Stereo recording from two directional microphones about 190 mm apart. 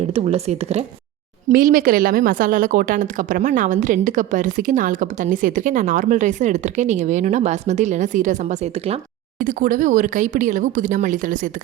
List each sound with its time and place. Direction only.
0.1 s a woman's voice: 30° right (ahead or behind)
1.5 s a woman's voice: 45° right (ahead or behind)
9.4 s speech: 45° right (ahead or behind)